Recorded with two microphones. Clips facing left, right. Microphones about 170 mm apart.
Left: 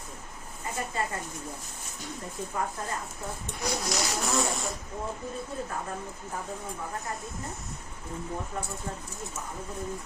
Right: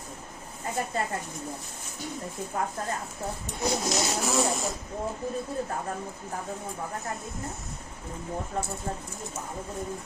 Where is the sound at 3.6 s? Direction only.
25° right (ahead or behind).